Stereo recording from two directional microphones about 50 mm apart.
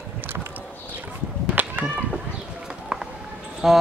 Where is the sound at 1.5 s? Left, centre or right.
Right.